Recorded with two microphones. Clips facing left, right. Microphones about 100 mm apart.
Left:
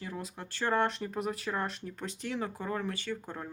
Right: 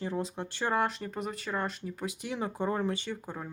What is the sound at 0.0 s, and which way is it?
Speech, 25° right (ahead or behind).